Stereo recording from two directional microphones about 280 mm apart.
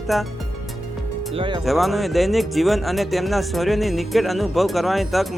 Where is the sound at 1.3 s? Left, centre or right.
Centre.